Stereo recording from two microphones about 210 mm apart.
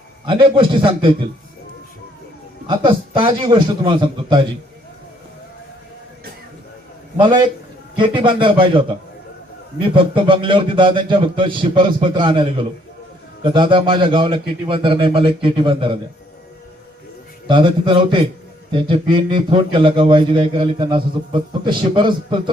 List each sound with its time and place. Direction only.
0.3 s a man's voice: 25° right (ahead or behind)
2.6 s a man's voice: 25° right (ahead or behind)
7.2 s a man's voice: 20° right (ahead or behind)
17.5 s a man's voice: 25° right (ahead or behind)